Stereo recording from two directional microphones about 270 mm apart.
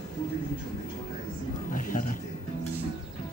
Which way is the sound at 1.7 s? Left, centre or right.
Left.